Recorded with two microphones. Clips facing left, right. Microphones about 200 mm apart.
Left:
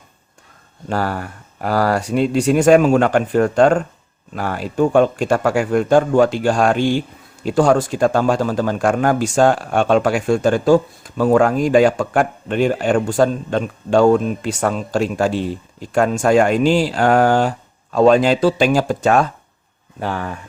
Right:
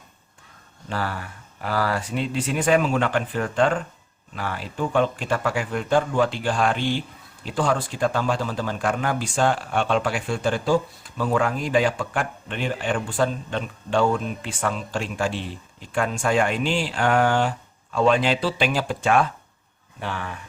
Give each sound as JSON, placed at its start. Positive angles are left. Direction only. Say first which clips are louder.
{"t": 0.9, "sound": "speech", "louder": "left 7 dB", "side_deg": 45}